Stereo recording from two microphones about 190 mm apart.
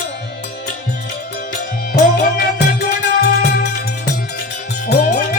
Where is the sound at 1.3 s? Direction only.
55° left (ahead or behind).